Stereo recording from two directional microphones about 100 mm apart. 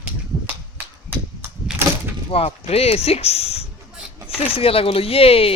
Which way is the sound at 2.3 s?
80° left.